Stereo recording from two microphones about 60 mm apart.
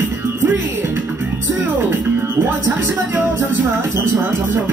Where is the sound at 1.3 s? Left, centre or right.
Right.